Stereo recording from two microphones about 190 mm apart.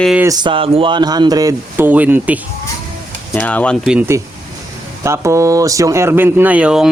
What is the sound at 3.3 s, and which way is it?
Speech, 10° left (ahead or behind).